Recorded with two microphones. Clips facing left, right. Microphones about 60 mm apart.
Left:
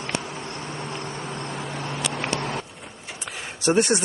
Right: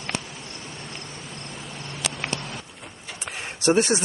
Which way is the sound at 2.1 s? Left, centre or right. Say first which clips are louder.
Left 5 dB; left.